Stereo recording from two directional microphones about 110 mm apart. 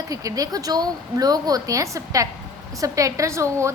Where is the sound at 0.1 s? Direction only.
30° right (ahead or behind).